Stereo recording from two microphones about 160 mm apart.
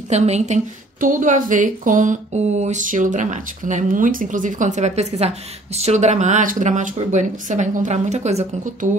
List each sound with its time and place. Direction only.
0.1 s speech: 45° right (ahead or behind)